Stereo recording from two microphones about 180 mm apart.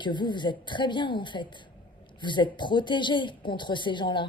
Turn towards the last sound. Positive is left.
turn(degrees=25)  # may be behind; listen again after turning